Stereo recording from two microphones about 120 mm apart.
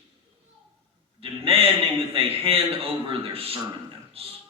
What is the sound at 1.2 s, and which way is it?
A man's voice, 50° right (ahead or behind).